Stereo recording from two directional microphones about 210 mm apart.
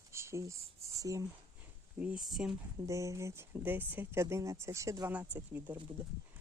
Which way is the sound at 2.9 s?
15° right (ahead or behind).